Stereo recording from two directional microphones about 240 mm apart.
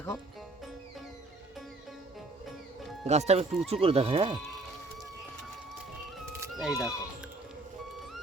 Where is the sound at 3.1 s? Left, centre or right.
Right.